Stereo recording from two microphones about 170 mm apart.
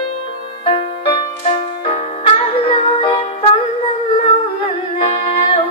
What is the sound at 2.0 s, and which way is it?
Music, 35° left (ahead or behind).